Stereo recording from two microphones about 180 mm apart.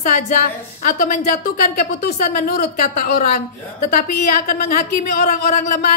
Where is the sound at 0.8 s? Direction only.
45° left (ahead or behind).